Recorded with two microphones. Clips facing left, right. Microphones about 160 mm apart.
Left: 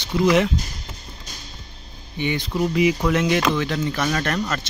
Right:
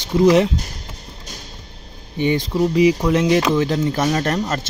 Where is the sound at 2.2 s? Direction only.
40° right (ahead or behind).